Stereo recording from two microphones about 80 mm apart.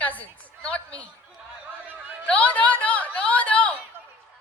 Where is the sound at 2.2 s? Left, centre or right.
Centre.